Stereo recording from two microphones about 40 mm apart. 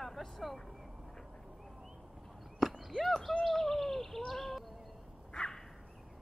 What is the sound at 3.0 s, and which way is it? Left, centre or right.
Speech, centre.